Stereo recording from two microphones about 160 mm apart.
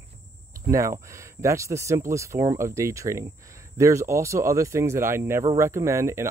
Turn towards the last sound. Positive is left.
turn(degrees=-15)  # may be behind; listen again after turning